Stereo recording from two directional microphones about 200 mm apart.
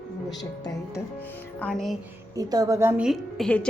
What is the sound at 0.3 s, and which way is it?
Speech, 20° left (ahead or behind).